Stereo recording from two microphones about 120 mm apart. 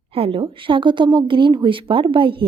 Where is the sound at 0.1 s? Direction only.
50° right (ahead or behind).